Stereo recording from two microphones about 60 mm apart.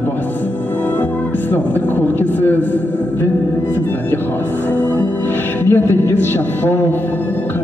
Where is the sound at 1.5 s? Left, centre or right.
Left.